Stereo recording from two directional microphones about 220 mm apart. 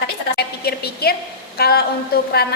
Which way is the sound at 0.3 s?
45° left (ahead or behind).